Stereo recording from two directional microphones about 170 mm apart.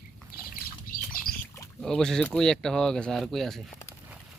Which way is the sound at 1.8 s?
5° left (ahead or behind).